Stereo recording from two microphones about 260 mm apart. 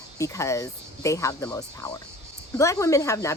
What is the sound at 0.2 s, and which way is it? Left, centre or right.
Speech, centre.